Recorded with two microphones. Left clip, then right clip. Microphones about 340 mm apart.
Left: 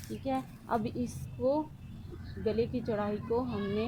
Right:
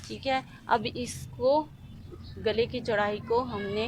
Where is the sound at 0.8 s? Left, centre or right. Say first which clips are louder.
Right 3 dB; right.